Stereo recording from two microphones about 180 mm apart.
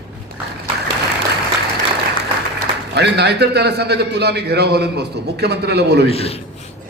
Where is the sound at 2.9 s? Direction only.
65° right (ahead or behind).